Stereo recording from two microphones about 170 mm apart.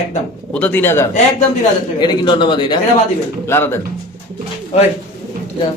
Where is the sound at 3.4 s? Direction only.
15° left (ahead or behind).